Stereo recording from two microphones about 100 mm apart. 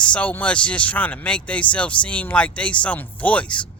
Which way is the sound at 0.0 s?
10° left (ahead or behind).